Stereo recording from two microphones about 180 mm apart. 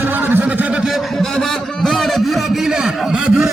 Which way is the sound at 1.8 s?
Centre (ahead or behind).